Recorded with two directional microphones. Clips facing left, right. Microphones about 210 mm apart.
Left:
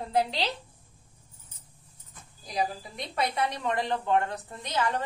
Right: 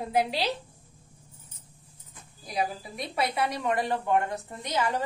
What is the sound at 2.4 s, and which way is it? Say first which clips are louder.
A woman's voice: even; 5° right (ahead or behind).